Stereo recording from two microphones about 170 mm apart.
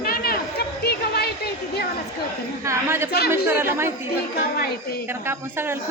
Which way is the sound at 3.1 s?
65° left (ahead or behind).